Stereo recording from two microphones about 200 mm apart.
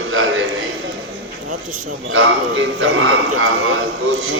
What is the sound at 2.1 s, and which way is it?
A man's voice, 70° right (ahead or behind).